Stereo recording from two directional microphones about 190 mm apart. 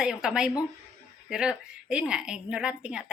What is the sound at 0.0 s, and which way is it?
Speech, 5° right (ahead or behind).